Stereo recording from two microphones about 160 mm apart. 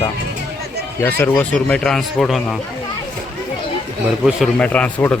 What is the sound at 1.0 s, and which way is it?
Speech, 10° left (ahead or behind).